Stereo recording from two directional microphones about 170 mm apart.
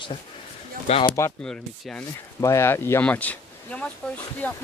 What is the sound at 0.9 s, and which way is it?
Speech, 40° left (ahead or behind).